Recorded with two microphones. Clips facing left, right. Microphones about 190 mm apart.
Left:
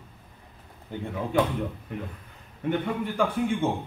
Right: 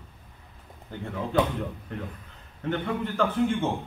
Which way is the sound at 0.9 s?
15° left (ahead or behind).